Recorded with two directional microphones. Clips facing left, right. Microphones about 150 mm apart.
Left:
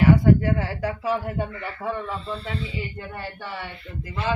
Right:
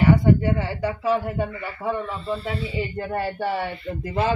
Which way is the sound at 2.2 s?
5° right (ahead or behind).